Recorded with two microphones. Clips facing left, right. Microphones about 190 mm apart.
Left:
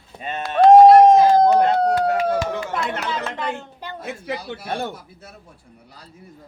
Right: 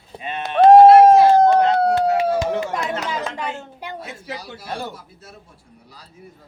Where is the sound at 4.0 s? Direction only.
55° left (ahead or behind).